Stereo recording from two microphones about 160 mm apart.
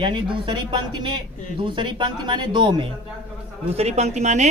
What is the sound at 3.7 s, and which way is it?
Speech, 40° right (ahead or behind).